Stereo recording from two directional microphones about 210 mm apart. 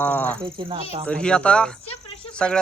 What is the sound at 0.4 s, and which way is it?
Speech, 25° right (ahead or behind).